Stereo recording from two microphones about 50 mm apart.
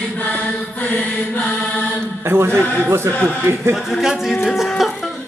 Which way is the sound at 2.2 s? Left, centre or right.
Right.